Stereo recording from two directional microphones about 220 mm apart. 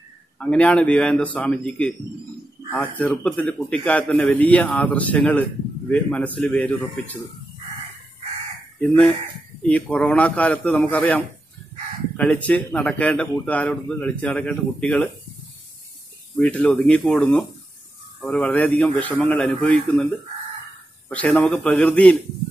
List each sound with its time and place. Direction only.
0.4 s a man's voice: 5° left (ahead or behind)
9.6 s speech: 5° left (ahead or behind)
16.3 s speech: 5° left (ahead or behind)
21.1 s speech: 5° left (ahead or behind)